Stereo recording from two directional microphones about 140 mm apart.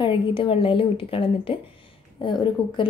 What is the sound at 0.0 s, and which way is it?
A woman's voice, 35° left (ahead or behind).